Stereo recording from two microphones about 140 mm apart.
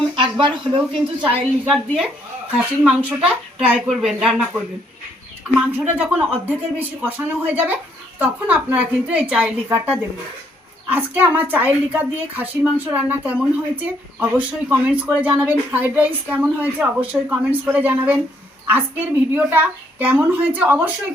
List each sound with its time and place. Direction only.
0.2 s speech: 35° right (ahead or behind)
1.6 s a woman's voice: centre (ahead or behind)
5.5 s a woman's voice: 10° right (ahead or behind)